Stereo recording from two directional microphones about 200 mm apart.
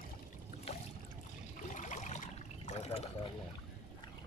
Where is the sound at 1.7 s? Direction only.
40° left (ahead or behind).